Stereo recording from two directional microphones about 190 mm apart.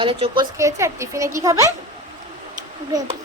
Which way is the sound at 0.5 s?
15° right (ahead or behind).